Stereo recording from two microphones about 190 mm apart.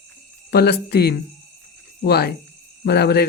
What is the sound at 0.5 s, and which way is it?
Speech, 55° left (ahead or behind).